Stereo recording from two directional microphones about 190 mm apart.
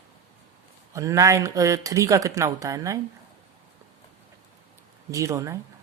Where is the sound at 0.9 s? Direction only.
15° right (ahead or behind).